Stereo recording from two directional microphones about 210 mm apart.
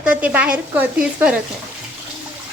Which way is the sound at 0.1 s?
5° right (ahead or behind).